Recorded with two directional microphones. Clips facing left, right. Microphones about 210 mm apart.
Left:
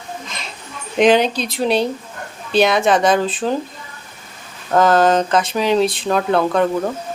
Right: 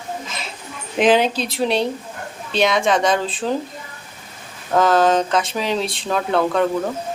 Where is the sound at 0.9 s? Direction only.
5° right (ahead or behind).